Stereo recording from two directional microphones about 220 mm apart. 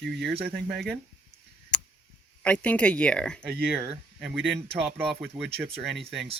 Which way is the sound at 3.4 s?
45° right (ahead or behind).